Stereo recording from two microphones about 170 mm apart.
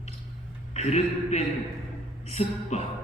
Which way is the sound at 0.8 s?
40° left (ahead or behind).